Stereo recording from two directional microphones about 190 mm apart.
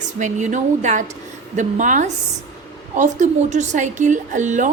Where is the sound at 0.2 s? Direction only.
40° right (ahead or behind).